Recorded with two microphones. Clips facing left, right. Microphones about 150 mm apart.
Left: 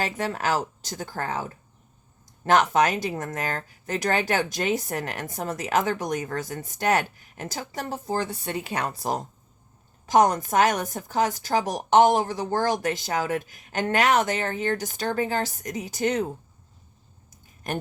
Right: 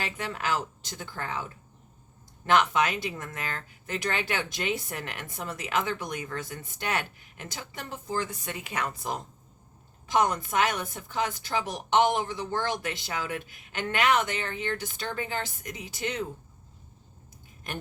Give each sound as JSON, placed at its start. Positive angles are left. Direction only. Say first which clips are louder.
{"t": 0.0, "sound": "speech", "louder": "left 6 dB", "side_deg": 40}
{"t": 17.7, "sound": "a woman's voice", "louder": "left 7 dB", "side_deg": 45}